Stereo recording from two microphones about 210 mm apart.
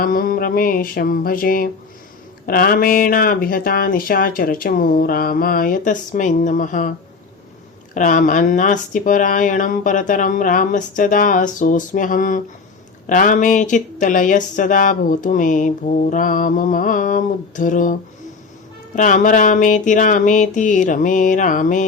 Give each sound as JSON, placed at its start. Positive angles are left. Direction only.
{"t": 0.0, "sound": "speech", "side_deg": 40}
{"t": 7.9, "sound": "speech", "side_deg": 40}
{"t": 18.9, "sound": "speech", "side_deg": 35}